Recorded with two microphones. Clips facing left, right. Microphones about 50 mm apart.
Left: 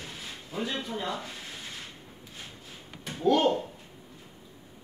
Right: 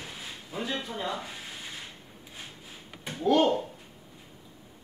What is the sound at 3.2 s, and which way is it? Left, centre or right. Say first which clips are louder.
Speech: even; centre.